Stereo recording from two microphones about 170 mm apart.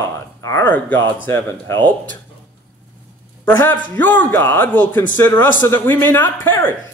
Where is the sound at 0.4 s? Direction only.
15° left (ahead or behind).